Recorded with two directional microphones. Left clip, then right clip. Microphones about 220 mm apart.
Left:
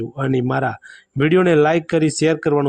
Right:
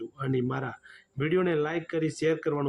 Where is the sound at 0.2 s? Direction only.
45° left (ahead or behind).